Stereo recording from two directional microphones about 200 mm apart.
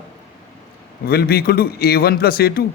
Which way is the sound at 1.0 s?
50° left (ahead or behind).